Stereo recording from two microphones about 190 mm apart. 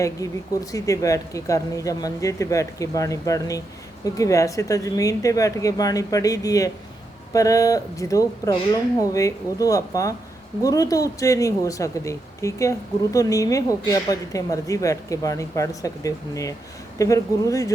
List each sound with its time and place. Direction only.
0.0 s speech: 20° left (ahead or behind)